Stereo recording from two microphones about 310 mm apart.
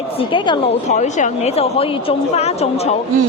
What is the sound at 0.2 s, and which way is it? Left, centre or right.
A woman's voice, centre.